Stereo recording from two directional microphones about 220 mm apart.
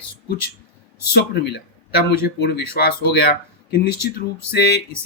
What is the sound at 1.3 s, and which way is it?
Speech, 50° left (ahead or behind).